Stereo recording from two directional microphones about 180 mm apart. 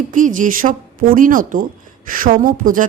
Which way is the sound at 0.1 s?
45° right (ahead or behind).